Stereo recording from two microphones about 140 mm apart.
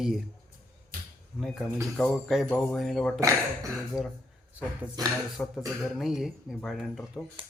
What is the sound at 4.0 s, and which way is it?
Speech, 25° left (ahead or behind).